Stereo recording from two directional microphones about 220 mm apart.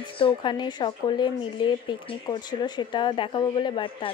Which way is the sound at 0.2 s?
20° left (ahead or behind).